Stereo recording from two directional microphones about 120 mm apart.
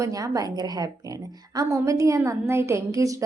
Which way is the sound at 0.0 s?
30° right (ahead or behind).